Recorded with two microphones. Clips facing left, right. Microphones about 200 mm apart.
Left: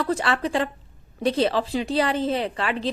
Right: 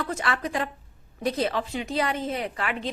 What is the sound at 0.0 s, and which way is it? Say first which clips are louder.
A woman's voice: left 5 dB; 30° left (ahead or behind).